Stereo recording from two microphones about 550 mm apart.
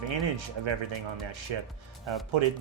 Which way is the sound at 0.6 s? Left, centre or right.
Right.